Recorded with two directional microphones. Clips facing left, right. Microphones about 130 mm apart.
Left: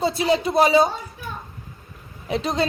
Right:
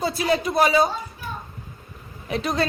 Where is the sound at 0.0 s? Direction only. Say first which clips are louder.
Left 2 dB; 25° left (ahead or behind).